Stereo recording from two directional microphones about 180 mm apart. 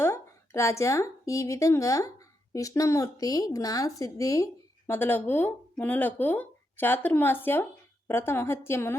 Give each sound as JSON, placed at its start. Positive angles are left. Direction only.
{"t": 0.0, "sound": "speech", "side_deg": 15}